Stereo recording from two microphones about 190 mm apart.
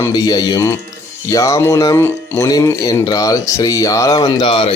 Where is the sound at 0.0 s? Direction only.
20° left (ahead or behind).